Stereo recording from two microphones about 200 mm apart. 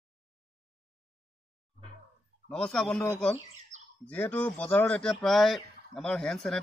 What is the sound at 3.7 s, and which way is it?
Bird, 35° right (ahead or behind).